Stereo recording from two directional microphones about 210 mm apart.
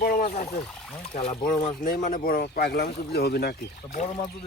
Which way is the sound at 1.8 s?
40° left (ahead or behind).